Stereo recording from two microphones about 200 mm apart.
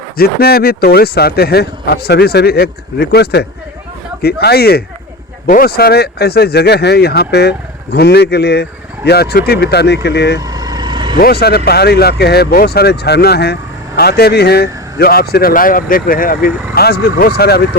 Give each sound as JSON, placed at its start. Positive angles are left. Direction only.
{"t": 0.2, "sound": "speech", "side_deg": 50}
{"t": 10.4, "sound": "vehicle", "side_deg": -20}
{"t": 11.2, "sound": "speech", "side_deg": 50}